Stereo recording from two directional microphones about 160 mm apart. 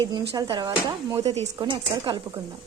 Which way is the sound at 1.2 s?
40° right (ahead or behind).